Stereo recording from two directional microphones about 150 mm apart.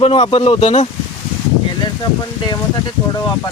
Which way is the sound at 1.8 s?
30° left (ahead or behind).